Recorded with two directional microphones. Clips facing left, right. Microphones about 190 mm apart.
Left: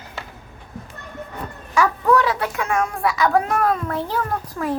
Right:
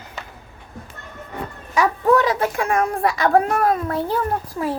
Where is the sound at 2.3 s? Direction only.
45° right (ahead or behind); by 4.7 s 20° right (ahead or behind).